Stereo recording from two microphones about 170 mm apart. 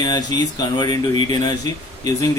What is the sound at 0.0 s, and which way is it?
Speech, 25° left (ahead or behind).